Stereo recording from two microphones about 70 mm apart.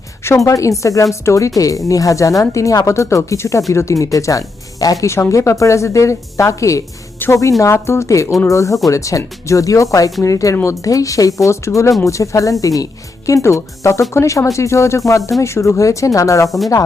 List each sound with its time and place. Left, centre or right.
0.3 s speech: left
5.0 s speech: left
7.2 s speech: left
7.6 s speech: left